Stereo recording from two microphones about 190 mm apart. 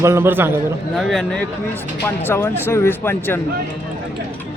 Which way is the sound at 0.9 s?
Centre (ahead or behind).